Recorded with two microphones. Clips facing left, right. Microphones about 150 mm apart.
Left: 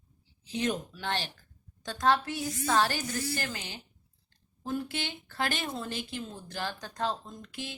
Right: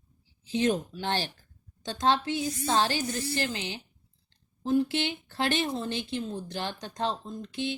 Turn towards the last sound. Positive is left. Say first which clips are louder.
# right 8 dB
turn(degrees=-25)  # may be behind; listen again after turning